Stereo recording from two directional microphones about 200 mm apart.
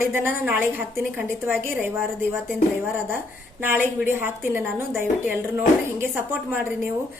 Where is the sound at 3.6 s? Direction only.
10° right (ahead or behind).